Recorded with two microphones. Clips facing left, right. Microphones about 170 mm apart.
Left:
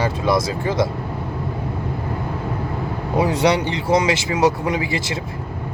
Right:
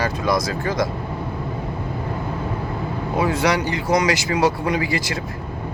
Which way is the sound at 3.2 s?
30° left (ahead or behind).